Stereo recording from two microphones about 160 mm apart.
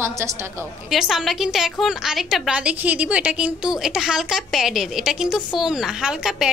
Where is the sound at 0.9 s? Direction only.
Centre (ahead or behind).